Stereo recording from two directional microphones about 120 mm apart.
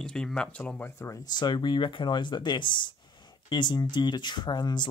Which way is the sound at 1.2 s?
35° left (ahead or behind).